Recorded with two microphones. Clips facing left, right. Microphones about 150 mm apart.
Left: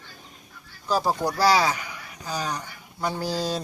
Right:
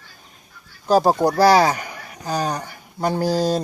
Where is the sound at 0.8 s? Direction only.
50° right (ahead or behind).